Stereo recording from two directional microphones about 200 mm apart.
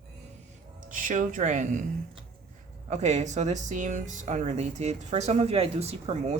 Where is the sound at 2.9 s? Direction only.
35° right (ahead or behind).